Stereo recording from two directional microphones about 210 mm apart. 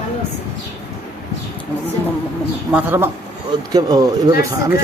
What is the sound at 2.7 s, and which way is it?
Speech, 10° right (ahead or behind).